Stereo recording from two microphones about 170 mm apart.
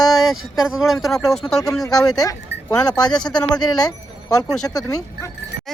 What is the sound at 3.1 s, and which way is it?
Speech, 5° left (ahead or behind).